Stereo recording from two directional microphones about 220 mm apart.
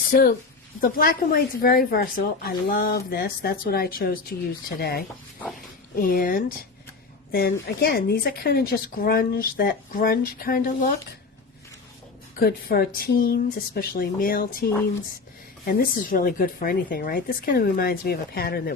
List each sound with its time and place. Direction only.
0.0 s speech: 40° left (ahead or behind)
12.4 s speech: 45° left (ahead or behind)